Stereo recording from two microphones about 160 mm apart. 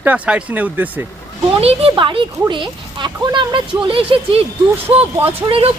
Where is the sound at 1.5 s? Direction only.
35° right (ahead or behind).